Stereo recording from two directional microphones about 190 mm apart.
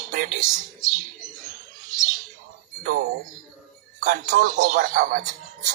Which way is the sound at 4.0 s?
50° right (ahead or behind).